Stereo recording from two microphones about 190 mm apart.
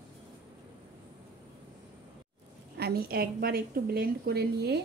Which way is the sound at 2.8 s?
55° right (ahead or behind).